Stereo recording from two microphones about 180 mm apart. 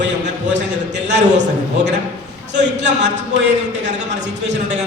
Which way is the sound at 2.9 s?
75° right (ahead or behind).